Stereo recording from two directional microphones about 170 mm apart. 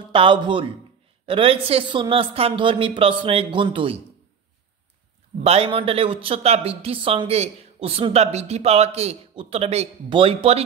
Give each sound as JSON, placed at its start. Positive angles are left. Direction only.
{"t": 0.1, "sound": "a man's voice", "side_deg": -30}
{"t": 5.4, "sound": "a man's voice", "side_deg": -35}